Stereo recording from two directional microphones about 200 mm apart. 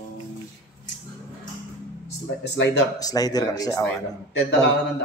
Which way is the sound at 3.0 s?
20° left (ahead or behind).